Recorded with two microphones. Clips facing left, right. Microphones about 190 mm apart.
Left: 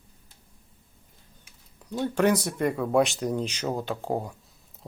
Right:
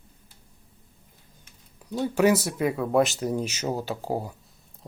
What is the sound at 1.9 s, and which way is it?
Speech, 5° right (ahead or behind).